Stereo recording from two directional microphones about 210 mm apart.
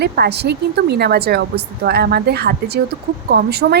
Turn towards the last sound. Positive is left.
turn(degrees=-50)  # may be behind; listen again after turning